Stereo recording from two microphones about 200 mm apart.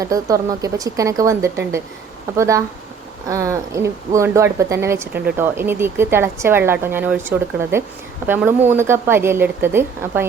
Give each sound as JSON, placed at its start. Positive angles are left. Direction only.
{"t": 0.0, "sound": "speech", "side_deg": -15}